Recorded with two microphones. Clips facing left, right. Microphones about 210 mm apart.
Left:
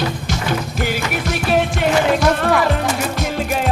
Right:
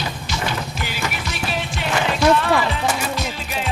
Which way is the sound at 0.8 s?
50° left (ahead or behind).